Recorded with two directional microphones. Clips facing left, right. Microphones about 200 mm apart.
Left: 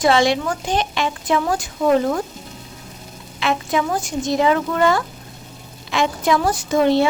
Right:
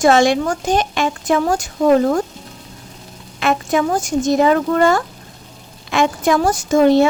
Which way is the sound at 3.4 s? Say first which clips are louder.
Right 3 dB; 50° right (ahead or behind).